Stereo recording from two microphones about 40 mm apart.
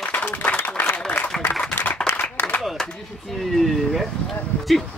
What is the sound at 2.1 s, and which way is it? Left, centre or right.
Applause, left.